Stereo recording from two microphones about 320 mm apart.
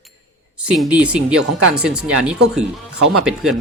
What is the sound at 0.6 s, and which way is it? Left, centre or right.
Speech, centre.